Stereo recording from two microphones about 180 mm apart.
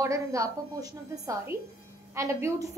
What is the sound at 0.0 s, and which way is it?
A woman's voice, 15° right (ahead or behind).